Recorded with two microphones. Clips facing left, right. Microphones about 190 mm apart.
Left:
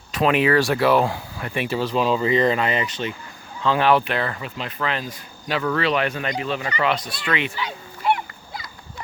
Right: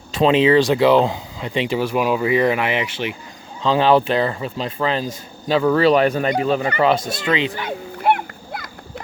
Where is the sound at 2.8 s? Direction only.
85° right.